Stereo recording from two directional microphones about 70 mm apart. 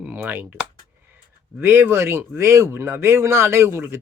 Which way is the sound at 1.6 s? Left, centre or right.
Right.